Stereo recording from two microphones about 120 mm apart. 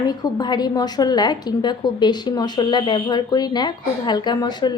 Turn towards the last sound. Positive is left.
turn(degrees=35)  # may be behind; listen again after turning